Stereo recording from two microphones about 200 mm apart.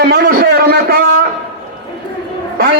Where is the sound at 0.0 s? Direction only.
50° right (ahead or behind).